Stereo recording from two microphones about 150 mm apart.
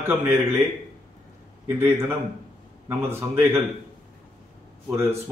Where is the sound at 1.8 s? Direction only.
15° right (ahead or behind).